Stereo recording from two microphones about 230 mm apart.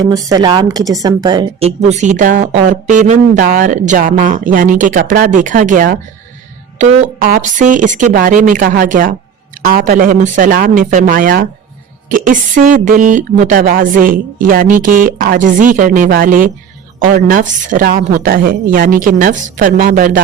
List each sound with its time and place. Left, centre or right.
0.0 s a woman's voice: centre; by 20.2 s right